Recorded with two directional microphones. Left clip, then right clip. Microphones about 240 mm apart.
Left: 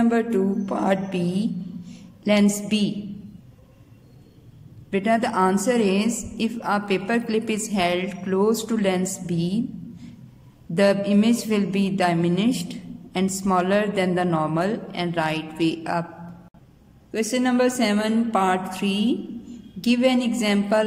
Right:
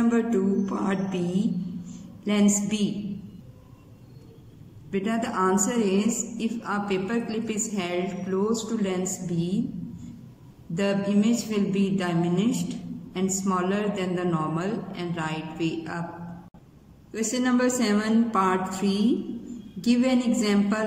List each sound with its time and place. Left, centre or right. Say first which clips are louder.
0.1 s a woman's voice: left 3 dB; centre
4.9 s a woman's voice: left 6 dB; left
10.7 s a woman's voice: left 7 dB; left
17.3 s a woman's voice: left 3 dB; centre